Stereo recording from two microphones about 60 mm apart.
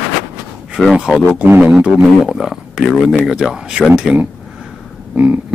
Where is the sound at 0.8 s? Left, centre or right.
Centre.